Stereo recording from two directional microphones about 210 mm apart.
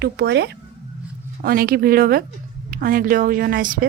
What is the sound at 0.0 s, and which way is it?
A woman's voice, 50° right (ahead or behind).